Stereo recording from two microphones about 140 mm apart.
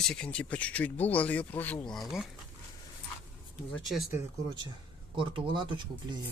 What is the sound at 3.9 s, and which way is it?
Speech, 90° left.